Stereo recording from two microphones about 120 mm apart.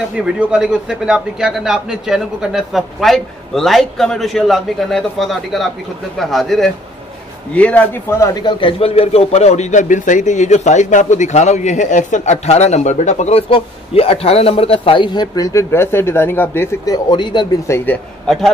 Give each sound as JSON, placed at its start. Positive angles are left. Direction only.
{"t": 0.2, "sound": "a man's voice", "side_deg": -5}
{"t": 7.5, "sound": "speech", "side_deg": 10}
{"t": 8.2, "sound": "a man's voice", "side_deg": 30}
{"t": 16.8, "sound": "speech", "side_deg": 35}
{"t": 17.6, "sound": "a man's voice", "side_deg": 20}
{"t": 18.2, "sound": "speech", "side_deg": 0}